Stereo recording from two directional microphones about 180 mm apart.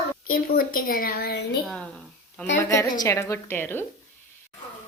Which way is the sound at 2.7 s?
15° left (ahead or behind).